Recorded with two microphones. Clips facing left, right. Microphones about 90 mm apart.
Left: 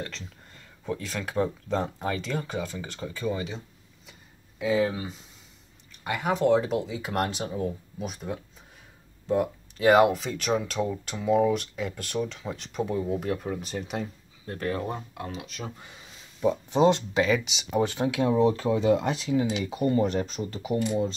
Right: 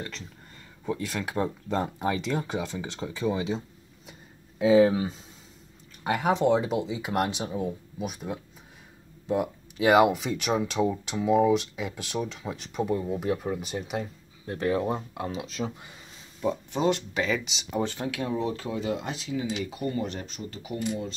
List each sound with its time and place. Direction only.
0.8 s speech: 5° right (ahead or behind); by 5.0 s 20° right (ahead or behind)
6.0 s speech: 30° right (ahead or behind)
6.4 s speech: 10° right (ahead or behind)
15.1 s speech: 30° right (ahead or behind)
16.7 s speech: 30° left (ahead or behind)
17.2 s speech: 5° left (ahead or behind)
17.9 s speech: 20° left (ahead or behind)
18.9 s speech: 50° left (ahead or behind)
19.6 s speech: 25° left (ahead or behind)
19.9 s speech: 45° left (ahead or behind)